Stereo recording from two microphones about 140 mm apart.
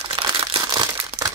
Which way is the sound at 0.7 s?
30° right (ahead or behind).